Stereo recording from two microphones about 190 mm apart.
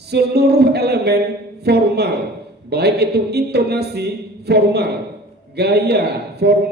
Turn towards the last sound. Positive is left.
turn(degrees=-60)  # may be behind; listen again after turning